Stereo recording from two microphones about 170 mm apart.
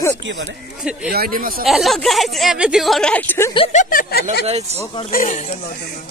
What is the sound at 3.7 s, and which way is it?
Speech, 55° left (ahead or behind).